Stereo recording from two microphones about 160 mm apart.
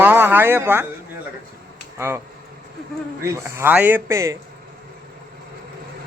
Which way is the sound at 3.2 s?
15° right (ahead or behind).